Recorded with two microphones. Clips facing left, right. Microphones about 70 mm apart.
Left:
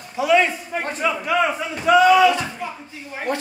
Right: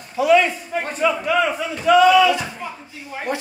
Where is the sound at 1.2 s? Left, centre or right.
Centre.